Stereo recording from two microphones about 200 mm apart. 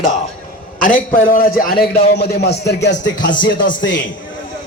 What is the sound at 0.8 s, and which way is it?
A man's voice, 40° left (ahead or behind).